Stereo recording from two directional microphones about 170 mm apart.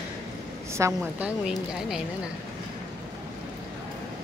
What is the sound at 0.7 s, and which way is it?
Speech, 15° right (ahead or behind).